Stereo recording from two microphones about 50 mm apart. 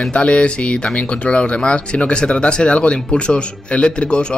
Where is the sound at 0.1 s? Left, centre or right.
Left.